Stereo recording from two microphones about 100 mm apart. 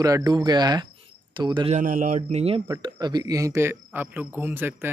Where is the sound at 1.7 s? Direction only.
90° right.